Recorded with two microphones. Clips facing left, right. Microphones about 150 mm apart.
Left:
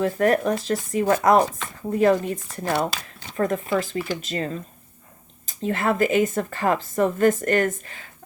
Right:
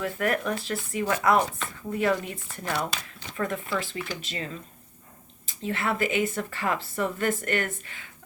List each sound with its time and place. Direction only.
0.0 s speech: 35° left (ahead or behind)
3.9 s speech: 5° left (ahead or behind)
4.3 s speech: 40° left (ahead or behind)